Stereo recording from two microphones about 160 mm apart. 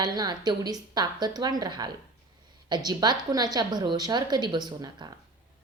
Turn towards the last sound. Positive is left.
turn(degrees=-25)  # may be behind; listen again after turning